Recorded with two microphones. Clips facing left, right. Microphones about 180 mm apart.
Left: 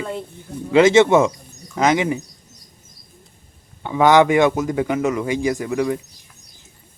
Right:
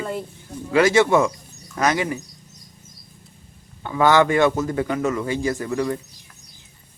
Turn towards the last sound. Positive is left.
turn(degrees=15)  # may be behind; listen again after turning